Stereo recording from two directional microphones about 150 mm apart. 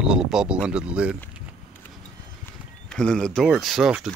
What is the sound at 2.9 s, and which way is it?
Speech, 5° left (ahead or behind).